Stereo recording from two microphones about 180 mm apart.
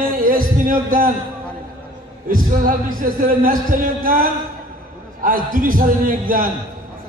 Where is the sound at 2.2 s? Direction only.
50° right (ahead or behind).